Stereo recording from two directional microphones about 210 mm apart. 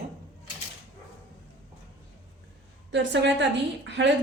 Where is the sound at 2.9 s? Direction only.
55° right (ahead or behind).